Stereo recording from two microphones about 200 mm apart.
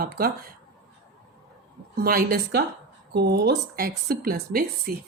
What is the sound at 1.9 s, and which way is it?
Speech, 50° right (ahead or behind).